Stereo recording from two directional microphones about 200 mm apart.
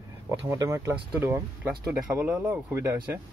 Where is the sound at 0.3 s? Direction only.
15° right (ahead or behind).